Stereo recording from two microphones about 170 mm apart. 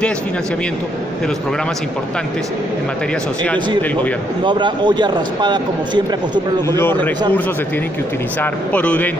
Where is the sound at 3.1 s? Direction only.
5° left (ahead or behind).